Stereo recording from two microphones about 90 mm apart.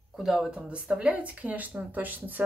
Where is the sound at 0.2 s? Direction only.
5° right (ahead or behind).